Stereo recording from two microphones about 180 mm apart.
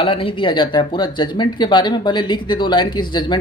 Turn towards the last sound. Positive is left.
turn(degrees=25)  # may be behind; listen again after turning